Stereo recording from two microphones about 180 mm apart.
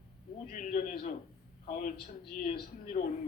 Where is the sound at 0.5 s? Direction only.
45° left (ahead or behind).